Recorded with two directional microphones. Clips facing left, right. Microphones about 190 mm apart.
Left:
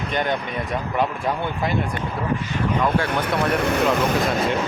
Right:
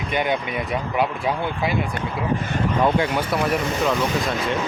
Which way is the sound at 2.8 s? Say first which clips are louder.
Right 3 dB; 15° right (ahead or behind).